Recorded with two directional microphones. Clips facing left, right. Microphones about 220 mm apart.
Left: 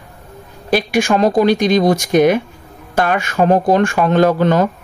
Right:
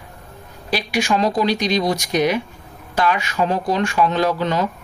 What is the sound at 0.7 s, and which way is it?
Speech, 50° left (ahead or behind).